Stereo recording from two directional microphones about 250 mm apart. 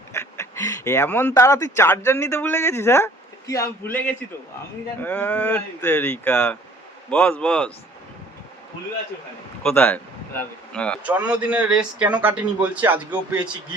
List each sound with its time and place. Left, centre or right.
0.1 s speech: centre
5.0 s speech: centre
9.6 s speech: centre